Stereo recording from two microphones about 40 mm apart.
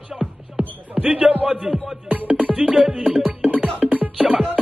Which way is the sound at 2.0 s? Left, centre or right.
Right.